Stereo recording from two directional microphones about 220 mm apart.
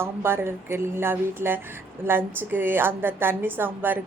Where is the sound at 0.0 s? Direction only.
10° right (ahead or behind).